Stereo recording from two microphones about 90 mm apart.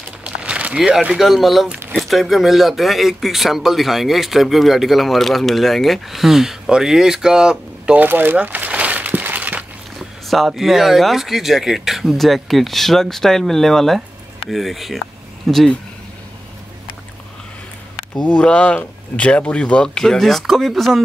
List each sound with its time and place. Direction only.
0.2 s a sound: 10° right (ahead or behind)
1.1 s speech: 5° right (ahead or behind)
9.9 s speech: centre (ahead or behind)
18.1 s speech: 10° left (ahead or behind)